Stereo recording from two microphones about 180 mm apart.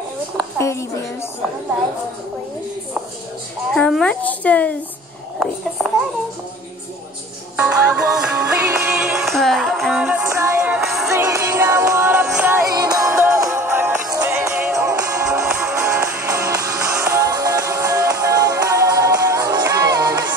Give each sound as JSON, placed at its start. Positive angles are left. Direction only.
{"t": 0.6, "sound": "a woman's voice", "side_deg": 15}
{"t": 3.7, "sound": "a woman's voice", "side_deg": 5}
{"t": 5.4, "sound": "music", "side_deg": 0}
{"t": 7.5, "sound": "music", "side_deg": -5}
{"t": 10.6, "sound": "music", "side_deg": -5}
{"t": 11.1, "sound": "music", "side_deg": -15}